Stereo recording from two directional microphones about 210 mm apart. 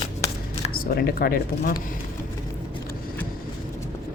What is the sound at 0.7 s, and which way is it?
Speech, 45° left (ahead or behind).